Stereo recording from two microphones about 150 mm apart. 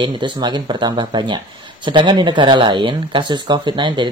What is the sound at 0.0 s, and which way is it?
Speech, 30° right (ahead or behind).